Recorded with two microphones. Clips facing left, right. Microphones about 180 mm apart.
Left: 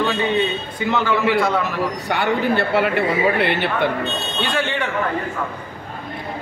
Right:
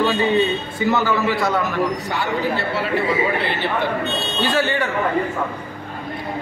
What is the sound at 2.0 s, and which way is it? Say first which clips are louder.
Speech: left 3 dB; 60° left (ahead or behind).